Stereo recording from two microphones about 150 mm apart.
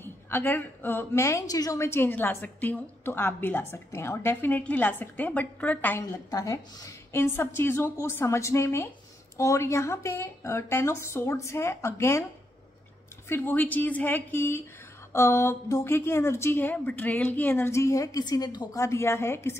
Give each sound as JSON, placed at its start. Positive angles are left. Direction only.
{"t": 0.0, "sound": "a woman's voice", "side_deg": 15}
{"t": 13.3, "sound": "a woman's voice", "side_deg": 15}